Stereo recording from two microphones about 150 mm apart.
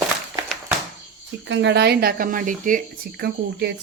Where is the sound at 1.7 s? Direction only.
90° right.